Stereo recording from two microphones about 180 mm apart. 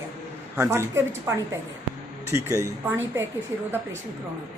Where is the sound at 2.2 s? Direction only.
15° right (ahead or behind).